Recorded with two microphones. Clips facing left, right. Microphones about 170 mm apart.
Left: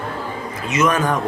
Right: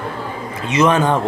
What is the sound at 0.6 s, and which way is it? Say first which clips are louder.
Speech: right 4 dB; 30° right (ahead or behind).